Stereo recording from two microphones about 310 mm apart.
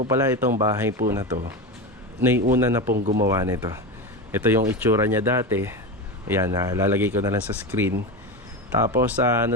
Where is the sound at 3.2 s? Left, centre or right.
Centre.